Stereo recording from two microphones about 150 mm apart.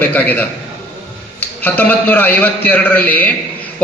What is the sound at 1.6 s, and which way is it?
A man's voice, 10° left (ahead or behind).